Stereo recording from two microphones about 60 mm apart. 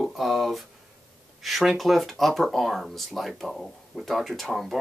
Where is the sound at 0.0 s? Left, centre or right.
Centre.